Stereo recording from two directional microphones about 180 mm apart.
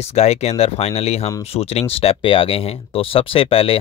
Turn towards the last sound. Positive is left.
turn(degrees=30)  # may be behind; listen again after turning